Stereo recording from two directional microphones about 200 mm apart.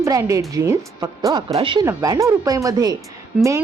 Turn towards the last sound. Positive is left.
turn(degrees=-5)  # may be behind; listen again after turning